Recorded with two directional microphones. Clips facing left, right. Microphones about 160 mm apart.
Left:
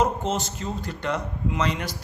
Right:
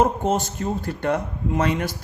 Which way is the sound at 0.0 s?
50° right (ahead or behind).